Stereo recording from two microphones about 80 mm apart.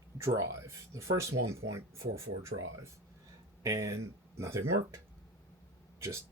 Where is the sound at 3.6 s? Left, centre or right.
Right.